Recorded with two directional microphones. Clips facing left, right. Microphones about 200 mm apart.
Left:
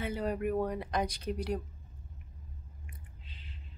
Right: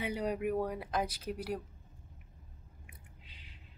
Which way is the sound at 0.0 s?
15° right (ahead or behind).